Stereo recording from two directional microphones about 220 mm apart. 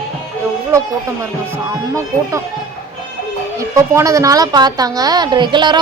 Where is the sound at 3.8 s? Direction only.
15° right (ahead or behind).